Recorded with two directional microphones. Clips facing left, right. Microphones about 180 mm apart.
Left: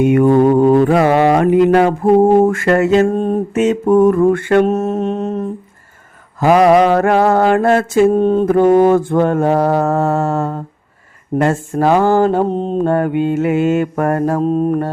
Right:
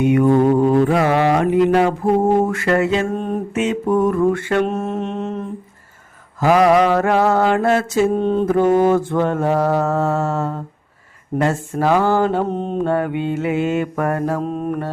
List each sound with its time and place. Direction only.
0.0 s music: 50° left (ahead or behind)
2.3 s mantra: 50° left (ahead or behind)
6.4 s mantra: 55° left (ahead or behind); by 12.8 s 30° left (ahead or behind)
12.8 s mantra: 45° left (ahead or behind)